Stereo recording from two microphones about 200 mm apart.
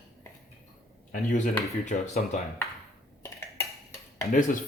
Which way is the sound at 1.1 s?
40° left (ahead or behind).